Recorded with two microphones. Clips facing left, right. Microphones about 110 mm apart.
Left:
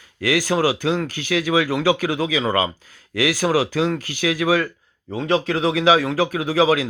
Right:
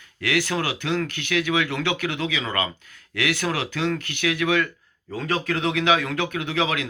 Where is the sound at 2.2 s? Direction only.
15° left (ahead or behind).